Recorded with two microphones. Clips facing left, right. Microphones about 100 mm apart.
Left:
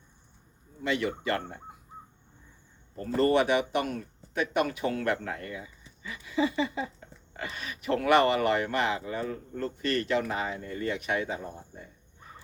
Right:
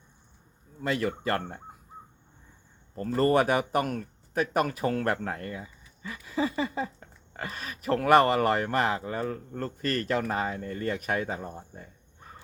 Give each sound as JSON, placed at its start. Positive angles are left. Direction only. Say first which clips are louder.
{"t": 0.8, "sound": "speech", "louder": "right 1 dB", "side_deg": -40}
{"t": 3.2, "sound": "speech", "louder": "even", "side_deg": -40}